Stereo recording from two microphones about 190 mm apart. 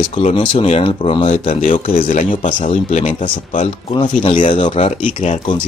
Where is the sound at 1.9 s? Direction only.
45° left (ahead or behind).